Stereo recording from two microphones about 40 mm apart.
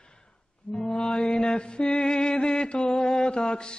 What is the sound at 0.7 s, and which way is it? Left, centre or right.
Mantra, left.